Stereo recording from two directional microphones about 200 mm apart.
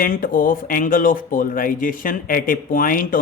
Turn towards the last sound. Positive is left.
turn(degrees=45)  # may be behind; listen again after turning